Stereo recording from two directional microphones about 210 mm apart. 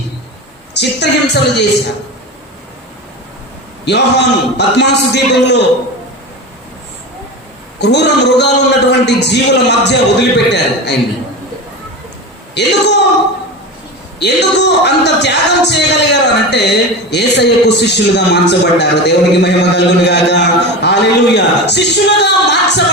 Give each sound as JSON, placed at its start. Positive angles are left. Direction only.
{"t": 0.7, "sound": "speech", "side_deg": 55}
{"t": 3.8, "sound": "speech", "side_deg": 55}
{"t": 7.8, "sound": "speech", "side_deg": 55}
{"t": 12.5, "sound": "speech", "side_deg": 55}
{"t": 14.2, "sound": "speech", "side_deg": 55}